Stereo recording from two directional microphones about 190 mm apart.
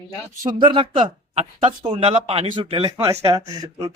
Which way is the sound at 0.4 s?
25° right (ahead or behind).